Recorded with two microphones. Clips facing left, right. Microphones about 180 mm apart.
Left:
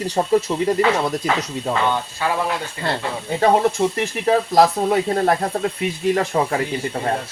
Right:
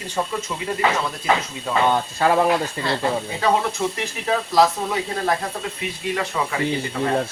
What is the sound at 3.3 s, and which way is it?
Speech, 50° left (ahead or behind).